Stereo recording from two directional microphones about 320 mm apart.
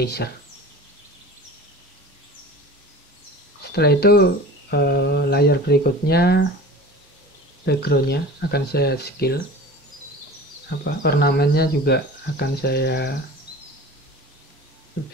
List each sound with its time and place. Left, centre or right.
0.0 s speech: left
3.7 s speech: left
7.6 s speech: left
11.0 s speech: left